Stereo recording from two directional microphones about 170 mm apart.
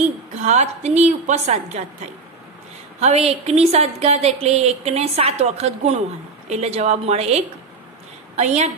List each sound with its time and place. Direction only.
0.4 s a woman's voice: 40° right (ahead or behind)
3.0 s a woman's voice: 40° right (ahead or behind)